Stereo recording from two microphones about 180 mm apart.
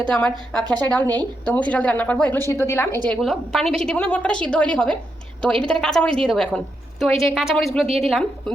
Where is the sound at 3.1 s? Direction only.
Centre (ahead or behind).